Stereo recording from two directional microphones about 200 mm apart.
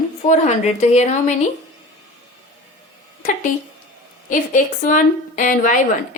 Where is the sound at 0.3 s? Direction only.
35° left (ahead or behind).